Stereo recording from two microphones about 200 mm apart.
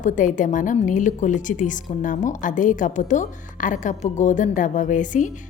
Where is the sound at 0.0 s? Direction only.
40° left (ahead or behind).